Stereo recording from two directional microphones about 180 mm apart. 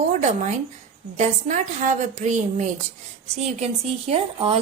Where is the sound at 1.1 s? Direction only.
40° right (ahead or behind).